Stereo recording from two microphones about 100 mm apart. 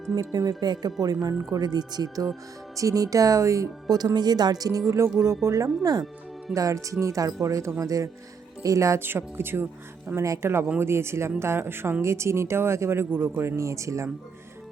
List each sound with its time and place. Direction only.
0.1 s speech: 35° right (ahead or behind)